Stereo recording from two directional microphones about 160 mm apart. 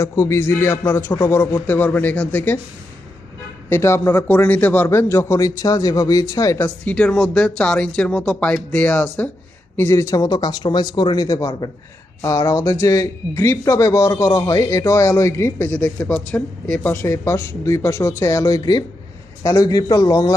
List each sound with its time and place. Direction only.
0.0 s speech: 20° left (ahead or behind)
3.7 s speech: 15° left (ahead or behind)
6.8 s speech: 5° left (ahead or behind); by 20.3 s 20° left (ahead or behind)